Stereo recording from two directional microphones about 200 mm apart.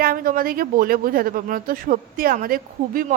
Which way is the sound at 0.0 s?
45° right (ahead or behind).